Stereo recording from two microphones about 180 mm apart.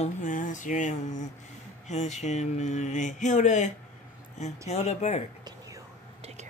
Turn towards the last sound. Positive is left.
turn(degrees=40)  # may be behind; listen again after turning